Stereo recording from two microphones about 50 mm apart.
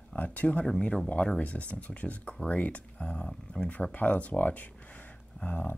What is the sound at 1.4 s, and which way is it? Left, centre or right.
Speech, left.